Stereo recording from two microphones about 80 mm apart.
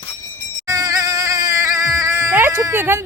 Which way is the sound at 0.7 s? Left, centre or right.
Right.